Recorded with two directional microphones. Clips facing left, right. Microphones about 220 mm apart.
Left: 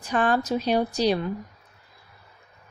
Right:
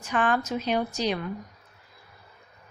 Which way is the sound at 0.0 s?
35° left (ahead or behind).